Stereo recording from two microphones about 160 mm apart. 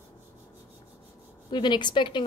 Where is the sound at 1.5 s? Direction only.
30° left (ahead or behind).